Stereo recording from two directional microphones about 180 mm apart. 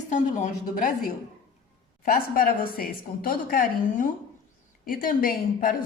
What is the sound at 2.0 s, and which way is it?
A woman's voice, 50° left (ahead or behind).